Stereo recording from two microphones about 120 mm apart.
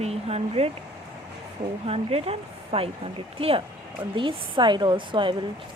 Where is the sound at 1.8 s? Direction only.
55° right (ahead or behind).